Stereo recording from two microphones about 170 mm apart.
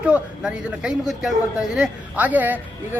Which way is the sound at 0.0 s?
5° right (ahead or behind).